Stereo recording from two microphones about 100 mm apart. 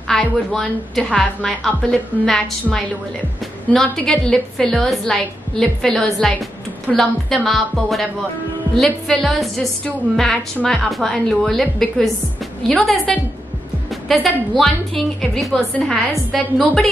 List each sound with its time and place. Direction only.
0.1 s a woman's voice: 5° left (ahead or behind)
3.7 s a woman's voice: 5° left (ahead or behind)